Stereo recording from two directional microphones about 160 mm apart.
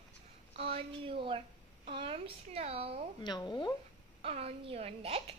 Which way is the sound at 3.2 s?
25° left (ahead or behind).